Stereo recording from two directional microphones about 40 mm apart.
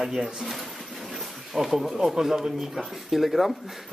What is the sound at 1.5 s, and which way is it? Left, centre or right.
Speech, centre.